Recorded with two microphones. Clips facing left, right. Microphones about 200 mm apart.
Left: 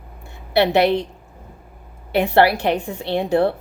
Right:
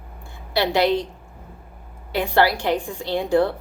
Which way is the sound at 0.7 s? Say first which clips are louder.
Left 1 dB; 60° left (ahead or behind).